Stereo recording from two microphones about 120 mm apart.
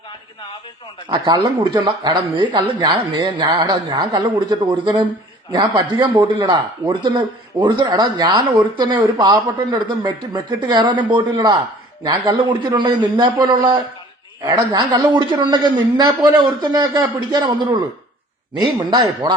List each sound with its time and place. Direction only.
1.1 s a man's voice: 40° right (ahead or behind)
18.8 s a man's voice: 35° right (ahead or behind)